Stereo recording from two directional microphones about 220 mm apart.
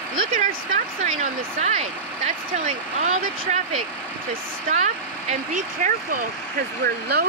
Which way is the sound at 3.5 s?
30° right (ahead or behind).